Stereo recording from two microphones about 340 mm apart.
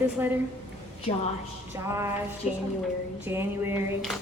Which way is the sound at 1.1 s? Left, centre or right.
Centre.